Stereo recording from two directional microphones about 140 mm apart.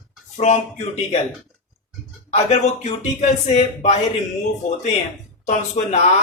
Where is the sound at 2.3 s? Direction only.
55° left (ahead or behind).